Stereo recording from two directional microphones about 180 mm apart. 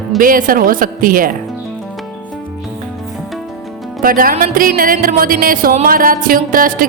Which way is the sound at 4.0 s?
55° right (ahead or behind).